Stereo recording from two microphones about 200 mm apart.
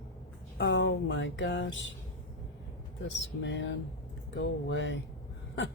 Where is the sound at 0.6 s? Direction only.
65° left (ahead or behind).